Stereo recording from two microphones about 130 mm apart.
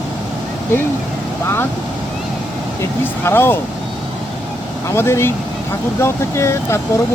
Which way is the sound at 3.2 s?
15° left (ahead or behind).